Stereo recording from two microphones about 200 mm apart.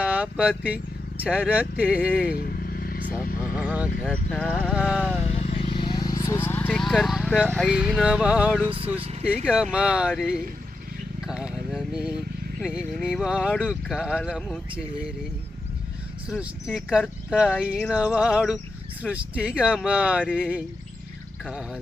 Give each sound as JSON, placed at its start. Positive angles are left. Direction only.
{"t": 0.0, "sound": "speech", "side_deg": -5}
{"t": 2.3, "sound": "vehicle", "side_deg": 50}
{"t": 3.5, "sound": "speech", "side_deg": -5}
{"t": 4.0, "sound": "speech", "side_deg": 5}
{"t": 4.6, "sound": "speech", "side_deg": -5}
{"t": 5.3, "sound": "vehicle", "side_deg": 30}
{"t": 7.5, "sound": "speech", "side_deg": 0}
{"t": 8.6, "sound": "speech", "side_deg": -25}
{"t": 9.2, "sound": "speech", "side_deg": -5}
{"t": 16.3, "sound": "speech", "side_deg": 0}